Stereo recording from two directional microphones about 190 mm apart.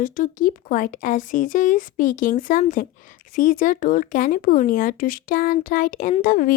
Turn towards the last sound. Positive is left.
turn(degrees=45)  # may be behind; listen again after turning